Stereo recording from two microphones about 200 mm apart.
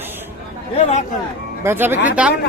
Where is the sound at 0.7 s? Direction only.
35° left (ahead or behind).